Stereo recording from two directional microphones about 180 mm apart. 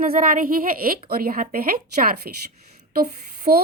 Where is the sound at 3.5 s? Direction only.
55° right (ahead or behind).